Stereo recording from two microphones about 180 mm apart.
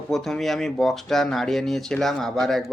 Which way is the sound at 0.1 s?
Centre (ahead or behind).